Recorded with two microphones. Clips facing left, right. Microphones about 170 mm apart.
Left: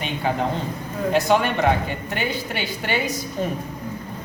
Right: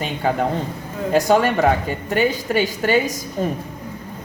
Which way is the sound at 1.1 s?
40° right (ahead or behind).